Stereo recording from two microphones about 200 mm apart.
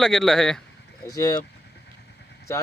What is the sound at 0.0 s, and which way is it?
Speech, 5° left (ahead or behind).